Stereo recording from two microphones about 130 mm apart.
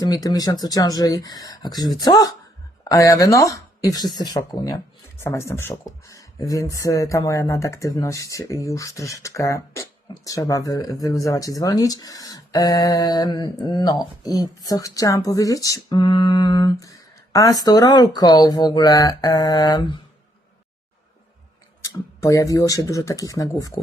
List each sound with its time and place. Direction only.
0.0 s speech: 30° left (ahead or behind)
5.1 s speech: 20° left (ahead or behind)
21.8 s speech: 25° left (ahead or behind)